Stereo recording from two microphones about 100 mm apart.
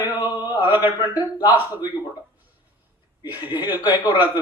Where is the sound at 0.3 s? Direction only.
20° right (ahead or behind).